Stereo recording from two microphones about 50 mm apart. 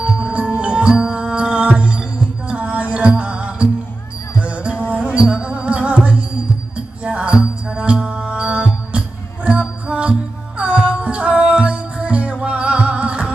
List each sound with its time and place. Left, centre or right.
0.0 s music: right